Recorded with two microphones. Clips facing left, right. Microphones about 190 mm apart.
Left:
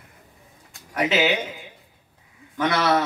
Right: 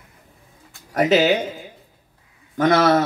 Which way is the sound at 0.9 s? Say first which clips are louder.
Right 5 dB; 40° right (ahead or behind).